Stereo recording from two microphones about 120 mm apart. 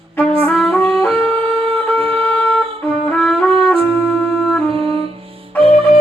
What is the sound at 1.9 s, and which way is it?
Wind instrument, 50° right (ahead or behind).